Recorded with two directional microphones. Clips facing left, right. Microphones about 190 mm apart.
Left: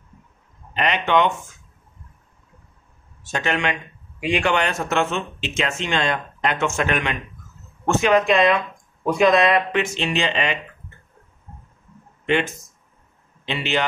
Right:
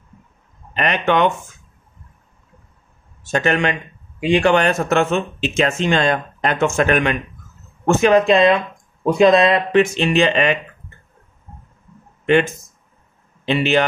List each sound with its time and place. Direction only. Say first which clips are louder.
0.7 s speech: right 2 dB; 50° right (ahead or behind)
3.3 s speech: right 5 dB; 50° right (ahead or behind)
4.2 s speech: right 6 dB; 35° right (ahead or behind)
8.1 s speech: right 3 dB; 30° right (ahead or behind)
9.9 s speech: right 7 dB; 50° right (ahead or behind)
13.5 s speech: right 7 dB; 50° right (ahead or behind)